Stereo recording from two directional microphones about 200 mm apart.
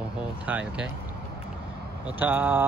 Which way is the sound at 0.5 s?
5° right (ahead or behind).